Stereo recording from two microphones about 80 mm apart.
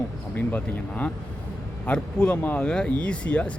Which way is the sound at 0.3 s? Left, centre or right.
Left.